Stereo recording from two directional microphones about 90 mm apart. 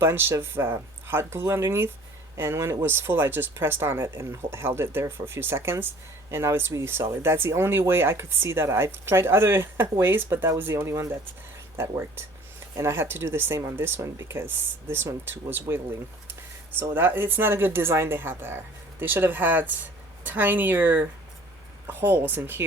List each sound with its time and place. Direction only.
0.0 s speech: 25° right (ahead or behind)